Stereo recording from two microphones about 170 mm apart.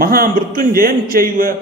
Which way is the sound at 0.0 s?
60° right (ahead or behind).